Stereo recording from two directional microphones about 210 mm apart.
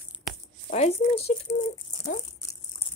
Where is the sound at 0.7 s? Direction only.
30° left (ahead or behind).